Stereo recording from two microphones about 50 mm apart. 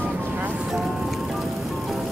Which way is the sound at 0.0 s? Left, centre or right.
Right.